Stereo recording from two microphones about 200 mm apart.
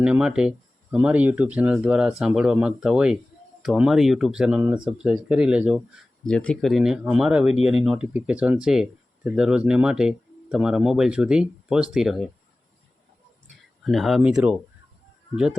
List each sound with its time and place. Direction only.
0.0 s speech: 5° right (ahead or behind)
6.2 s speech: 5° left (ahead or behind)
7.5 s speech: 30° left (ahead or behind)
7.9 s speech: 5° right (ahead or behind)
13.8 s speech: centre (ahead or behind)